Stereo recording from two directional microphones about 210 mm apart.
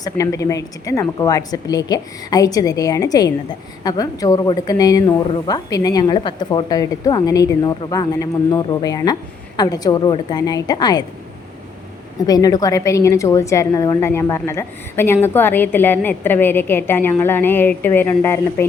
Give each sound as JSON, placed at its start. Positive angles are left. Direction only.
{"t": 0.0, "sound": "a woman's voice", "side_deg": 15}
{"t": 12.2, "sound": "a woman's voice", "side_deg": 15}